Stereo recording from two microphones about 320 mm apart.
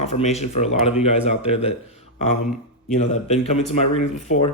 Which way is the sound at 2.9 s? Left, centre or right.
Left.